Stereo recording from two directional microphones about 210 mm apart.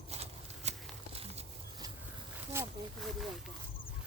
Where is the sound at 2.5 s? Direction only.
10° right (ahead or behind).